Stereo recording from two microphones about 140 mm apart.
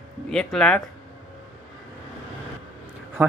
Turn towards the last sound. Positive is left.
turn(degrees=-15)  # may be behind; listen again after turning